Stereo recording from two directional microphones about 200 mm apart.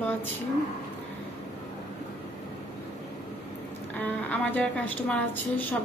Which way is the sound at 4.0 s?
10° left (ahead or behind).